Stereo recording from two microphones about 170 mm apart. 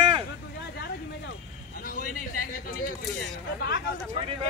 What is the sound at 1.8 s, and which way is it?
Speech, 55° left (ahead or behind).